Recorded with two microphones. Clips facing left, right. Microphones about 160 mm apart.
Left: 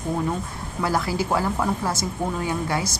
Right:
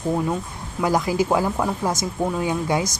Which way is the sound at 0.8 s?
15° right (ahead or behind).